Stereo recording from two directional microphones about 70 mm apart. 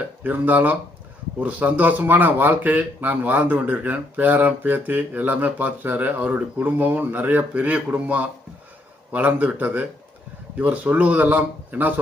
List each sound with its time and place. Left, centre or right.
0.2 s speech: right